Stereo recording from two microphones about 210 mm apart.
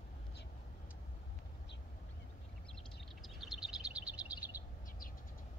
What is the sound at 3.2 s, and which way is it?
Bird, centre (ahead or behind).